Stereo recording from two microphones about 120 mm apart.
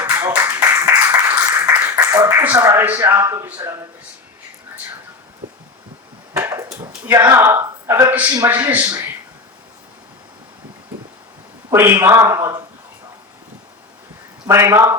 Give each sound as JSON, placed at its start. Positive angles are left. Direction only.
{"t": 0.0, "sound": "a sound", "side_deg": -20}
{"t": 2.4, "sound": "speech", "side_deg": -20}
{"t": 6.3, "sound": "a sound", "side_deg": -20}
{"t": 7.0, "sound": "speech", "side_deg": -20}
{"t": 11.7, "sound": "speech", "side_deg": -25}
{"t": 14.4, "sound": "speech", "side_deg": -20}